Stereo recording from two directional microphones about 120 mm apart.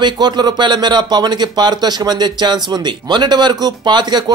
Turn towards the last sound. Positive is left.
turn(degrees=-35)  # may be behind; listen again after turning